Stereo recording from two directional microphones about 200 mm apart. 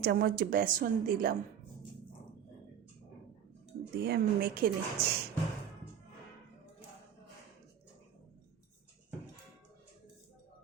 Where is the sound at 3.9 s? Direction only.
50° right (ahead or behind).